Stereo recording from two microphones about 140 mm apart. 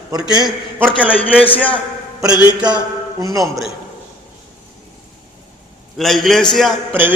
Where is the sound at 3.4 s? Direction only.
Centre (ahead or behind).